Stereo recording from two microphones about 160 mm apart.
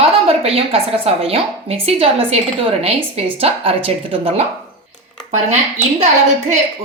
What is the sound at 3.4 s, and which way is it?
Speech, 35° right (ahead or behind).